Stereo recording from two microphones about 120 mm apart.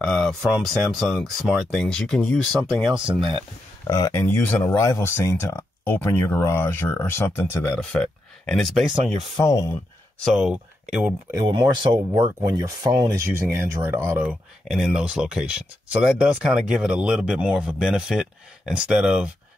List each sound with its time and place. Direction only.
0.0 s speech: 5° left (ahead or behind)
3.2 s speech: 45° right (ahead or behind)
3.8 s speech: 25° left (ahead or behind)
7.7 s speech: 10° left (ahead or behind)
9.4 s speech: 25° left (ahead or behind)
10.2 s speech: centre (ahead or behind)
11.4 s speech: 40° right (ahead or behind); by 14.3 s 20° right (ahead or behind)
14.7 s speech: centre (ahead or behind)